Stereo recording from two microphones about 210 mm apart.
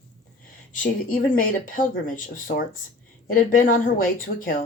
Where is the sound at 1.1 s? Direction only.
40° left (ahead or behind).